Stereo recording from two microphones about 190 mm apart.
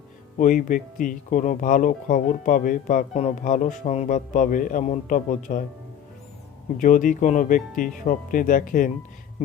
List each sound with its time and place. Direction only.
0.3 s speech: 45° left (ahead or behind)
6.7 s speech: 45° left (ahead or behind)